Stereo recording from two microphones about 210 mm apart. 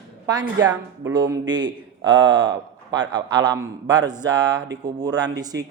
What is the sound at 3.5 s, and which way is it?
Speech, 20° right (ahead or behind).